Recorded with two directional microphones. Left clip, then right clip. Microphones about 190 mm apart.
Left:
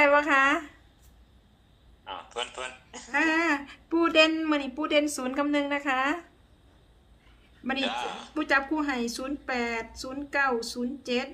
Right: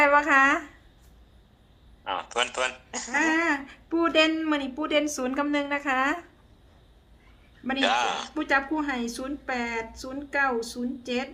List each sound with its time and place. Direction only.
0.0 s speech: centre (ahead or behind)
2.0 s a man's voice: 55° right (ahead or behind)
3.1 s speech: 5° left (ahead or behind)
7.8 s a man's voice: 55° right (ahead or behind)
8.4 s speech: 5° left (ahead or behind)